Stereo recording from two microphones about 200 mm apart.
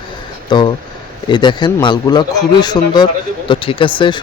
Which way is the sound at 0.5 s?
20° left (ahead or behind).